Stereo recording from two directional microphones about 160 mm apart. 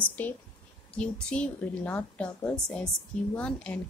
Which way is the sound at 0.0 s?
10° left (ahead or behind).